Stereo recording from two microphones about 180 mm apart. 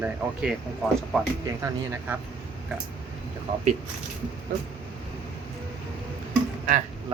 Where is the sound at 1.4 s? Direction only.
15° right (ahead or behind).